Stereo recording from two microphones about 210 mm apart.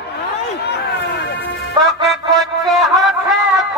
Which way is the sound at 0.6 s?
50° left (ahead or behind).